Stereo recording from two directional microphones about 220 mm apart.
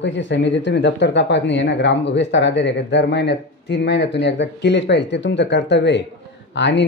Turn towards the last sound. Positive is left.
turn(degrees=55)  # may be behind; listen again after turning